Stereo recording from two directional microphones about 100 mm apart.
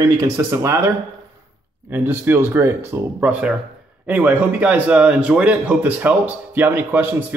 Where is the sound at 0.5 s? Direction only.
30° right (ahead or behind).